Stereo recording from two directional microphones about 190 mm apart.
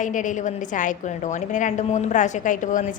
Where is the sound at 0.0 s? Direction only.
40° left (ahead or behind).